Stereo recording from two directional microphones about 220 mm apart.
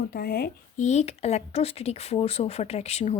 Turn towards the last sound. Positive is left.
turn(degrees=30)  # may be behind; listen again after turning